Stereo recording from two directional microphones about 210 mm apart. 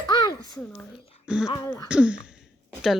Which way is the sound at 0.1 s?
20° left (ahead or behind).